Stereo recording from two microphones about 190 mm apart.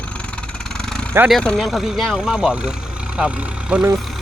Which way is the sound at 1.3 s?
Centre (ahead or behind).